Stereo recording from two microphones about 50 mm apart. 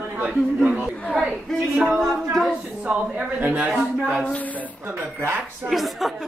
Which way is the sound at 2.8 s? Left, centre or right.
Right.